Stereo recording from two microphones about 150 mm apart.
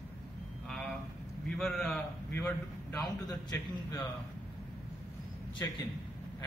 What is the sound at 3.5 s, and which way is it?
Speech, 25° left (ahead or behind).